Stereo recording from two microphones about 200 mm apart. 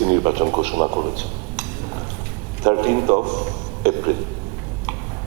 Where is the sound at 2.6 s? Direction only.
30° right (ahead or behind).